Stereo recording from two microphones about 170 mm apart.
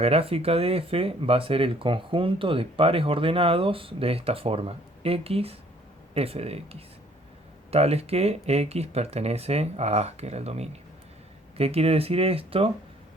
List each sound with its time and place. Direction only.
0.0 s speech: 35° right (ahead or behind)